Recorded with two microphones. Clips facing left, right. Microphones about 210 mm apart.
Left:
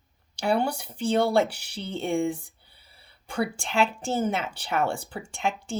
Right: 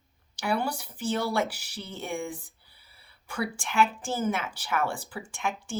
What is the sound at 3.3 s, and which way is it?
A woman's voice, 30° left (ahead or behind).